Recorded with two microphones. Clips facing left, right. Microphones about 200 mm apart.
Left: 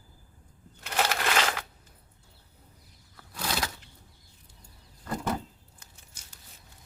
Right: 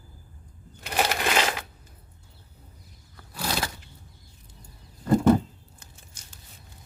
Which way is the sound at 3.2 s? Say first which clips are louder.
Right 3 dB; 5° right (ahead or behind).